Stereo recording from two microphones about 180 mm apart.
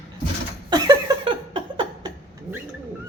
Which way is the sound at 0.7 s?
25° right (ahead or behind).